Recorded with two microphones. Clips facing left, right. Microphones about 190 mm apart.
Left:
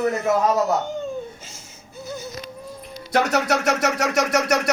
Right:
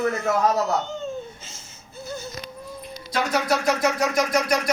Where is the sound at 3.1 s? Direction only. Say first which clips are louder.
Left 3 dB; 75° left (ahead or behind).